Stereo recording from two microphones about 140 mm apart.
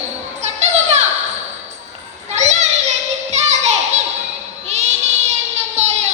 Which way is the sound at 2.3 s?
55° right (ahead or behind).